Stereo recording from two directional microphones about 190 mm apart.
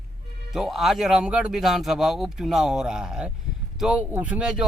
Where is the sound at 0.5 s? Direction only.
Centre (ahead or behind).